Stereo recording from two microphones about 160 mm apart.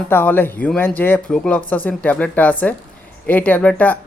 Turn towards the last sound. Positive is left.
turn(degrees=10)  # may be behind; listen again after turning